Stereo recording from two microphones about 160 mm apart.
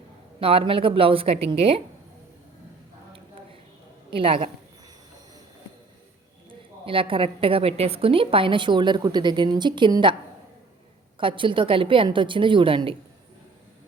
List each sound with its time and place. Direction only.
0.3 s a woman's voice: 35° right (ahead or behind)
4.1 s a woman's voice: 35° right (ahead or behind)
6.5 s a woman's voice: 35° right (ahead or behind)
11.2 s a woman's voice: 30° right (ahead or behind)